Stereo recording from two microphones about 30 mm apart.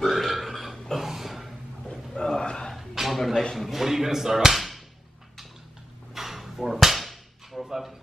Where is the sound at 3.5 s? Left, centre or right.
Centre.